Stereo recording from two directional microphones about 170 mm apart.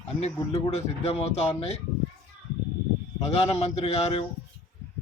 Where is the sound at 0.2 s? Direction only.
35° left (ahead or behind).